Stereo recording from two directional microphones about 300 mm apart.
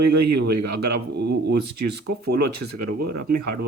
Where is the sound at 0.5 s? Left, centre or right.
Right.